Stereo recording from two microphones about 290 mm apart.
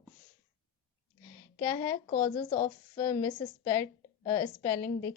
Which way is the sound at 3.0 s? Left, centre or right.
Centre.